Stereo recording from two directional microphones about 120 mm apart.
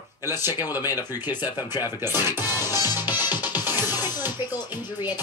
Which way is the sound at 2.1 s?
30° left (ahead or behind).